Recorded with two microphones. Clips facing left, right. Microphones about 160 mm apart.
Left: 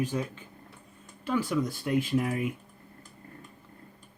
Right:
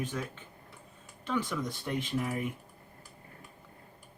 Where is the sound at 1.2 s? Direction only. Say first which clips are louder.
Left 5 dB; 10° left (ahead or behind).